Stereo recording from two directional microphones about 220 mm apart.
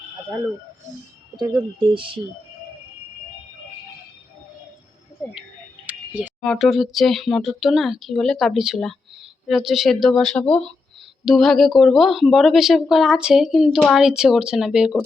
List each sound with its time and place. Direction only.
2.0 s speech: 25° right (ahead or behind)
5.8 s speech: 5° right (ahead or behind)